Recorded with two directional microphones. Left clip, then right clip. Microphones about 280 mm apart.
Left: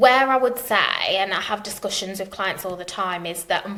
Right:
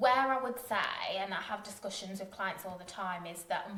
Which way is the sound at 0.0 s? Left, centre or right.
Left.